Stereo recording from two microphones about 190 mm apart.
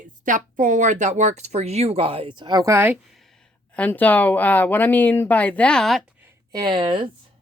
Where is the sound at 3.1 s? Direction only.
Centre (ahead or behind).